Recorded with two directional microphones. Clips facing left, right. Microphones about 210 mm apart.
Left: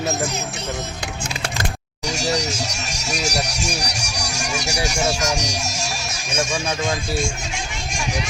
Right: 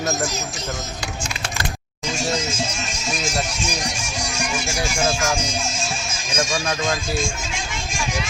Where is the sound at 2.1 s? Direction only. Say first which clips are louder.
Left 1 dB; 70° left (ahead or behind).